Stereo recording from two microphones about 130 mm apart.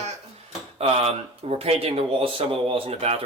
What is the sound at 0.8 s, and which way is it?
Speech, 50° right (ahead or behind).